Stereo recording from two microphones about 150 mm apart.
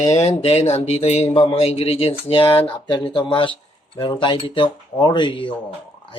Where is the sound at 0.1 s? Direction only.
45° left (ahead or behind).